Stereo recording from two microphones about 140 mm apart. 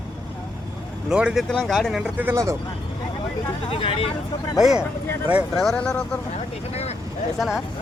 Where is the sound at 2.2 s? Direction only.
20° right (ahead or behind).